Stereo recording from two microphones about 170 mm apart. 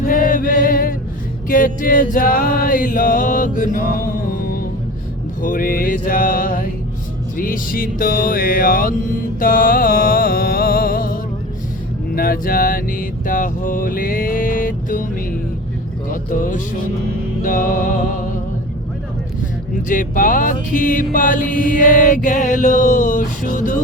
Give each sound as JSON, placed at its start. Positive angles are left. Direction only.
{"t": 0.0, "sound": "chant", "side_deg": 55}
{"t": 1.5, "sound": "music", "side_deg": 55}
{"t": 12.1, "sound": "mantra", "side_deg": 60}
{"t": 16.0, "sound": "music", "side_deg": 50}
{"t": 17.4, "sound": "mantra", "side_deg": 55}
{"t": 19.9, "sound": "mantra", "side_deg": 50}